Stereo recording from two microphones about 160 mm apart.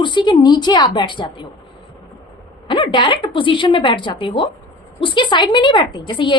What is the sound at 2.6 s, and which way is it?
A woman's voice, 30° left (ahead or behind).